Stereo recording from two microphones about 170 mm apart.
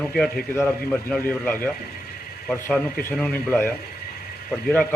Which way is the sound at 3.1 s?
5° left (ahead or behind).